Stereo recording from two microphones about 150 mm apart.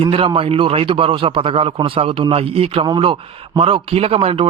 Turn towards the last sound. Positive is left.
turn(degrees=-40)  # may be behind; listen again after turning